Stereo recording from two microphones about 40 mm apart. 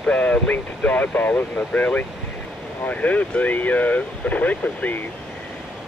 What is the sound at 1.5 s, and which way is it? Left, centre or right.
Speech, left.